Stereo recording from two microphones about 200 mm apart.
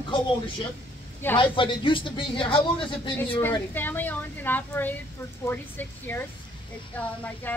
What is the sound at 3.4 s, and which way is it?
Speech, 10° left (ahead or behind).